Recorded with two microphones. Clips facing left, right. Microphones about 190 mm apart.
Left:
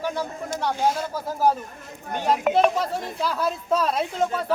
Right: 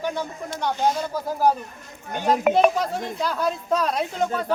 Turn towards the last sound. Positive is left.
turn(degrees=0)  # may be behind; listen again after turning